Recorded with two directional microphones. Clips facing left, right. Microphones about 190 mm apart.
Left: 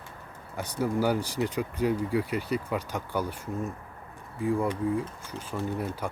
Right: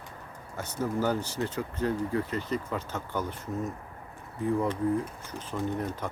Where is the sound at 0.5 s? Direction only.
10° left (ahead or behind).